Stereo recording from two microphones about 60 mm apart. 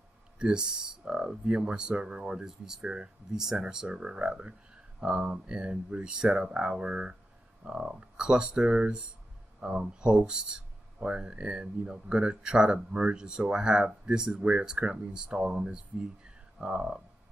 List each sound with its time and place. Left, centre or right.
0.4 s speech: centre